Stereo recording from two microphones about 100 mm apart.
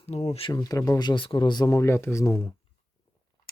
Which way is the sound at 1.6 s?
30° left (ahead or behind).